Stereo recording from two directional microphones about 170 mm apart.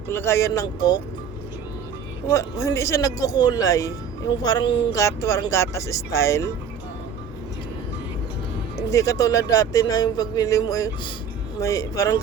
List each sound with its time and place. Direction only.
0.1 s a man's voice: 15° left (ahead or behind)
2.3 s a man's voice: 15° left (ahead or behind)
8.9 s a man's voice: 20° left (ahead or behind)